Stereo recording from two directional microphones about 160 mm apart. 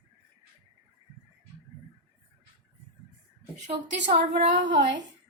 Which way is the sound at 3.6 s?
45° right (ahead or behind).